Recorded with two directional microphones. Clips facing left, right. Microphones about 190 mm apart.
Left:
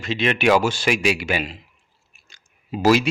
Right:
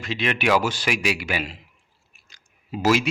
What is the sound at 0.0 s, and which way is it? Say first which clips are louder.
A man's voice: left 4 dB; 25° left (ahead or behind).